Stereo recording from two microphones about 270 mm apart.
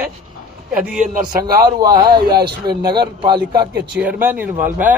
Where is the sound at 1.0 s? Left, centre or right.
Right.